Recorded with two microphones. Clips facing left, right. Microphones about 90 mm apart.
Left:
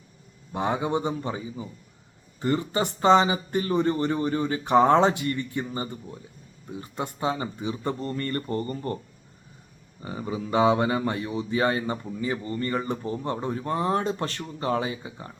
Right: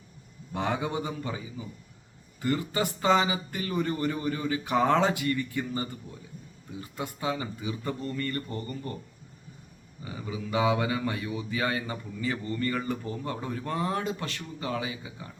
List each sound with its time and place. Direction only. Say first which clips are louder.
0.5 s speech: left 4 dB; 20° left (ahead or behind); by 9.0 s 45° left (ahead or behind)
10.0 s speech: left 5 dB; 40° left (ahead or behind)
12.2 s speech: even; 25° left (ahead or behind)